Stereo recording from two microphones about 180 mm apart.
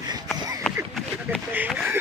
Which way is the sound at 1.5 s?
10° right (ahead or behind).